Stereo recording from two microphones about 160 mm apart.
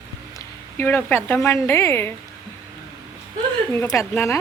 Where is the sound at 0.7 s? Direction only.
15° left (ahead or behind).